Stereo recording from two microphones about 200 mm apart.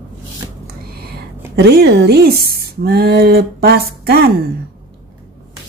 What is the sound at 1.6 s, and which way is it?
Speech, 55° right (ahead or behind).